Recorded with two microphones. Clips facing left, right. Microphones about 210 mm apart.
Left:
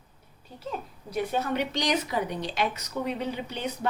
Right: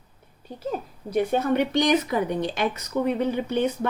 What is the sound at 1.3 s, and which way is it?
Speech, 55° right (ahead or behind).